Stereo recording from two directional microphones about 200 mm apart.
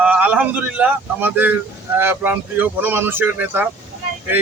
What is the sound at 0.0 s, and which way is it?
A man's voice, 5° right (ahead or behind).